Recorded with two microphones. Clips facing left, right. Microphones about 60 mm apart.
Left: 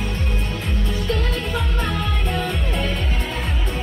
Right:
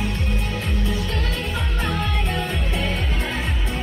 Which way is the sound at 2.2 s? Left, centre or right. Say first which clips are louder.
Left 1 dB; centre.